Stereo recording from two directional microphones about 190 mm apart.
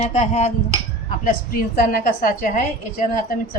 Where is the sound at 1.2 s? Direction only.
50° left (ahead or behind).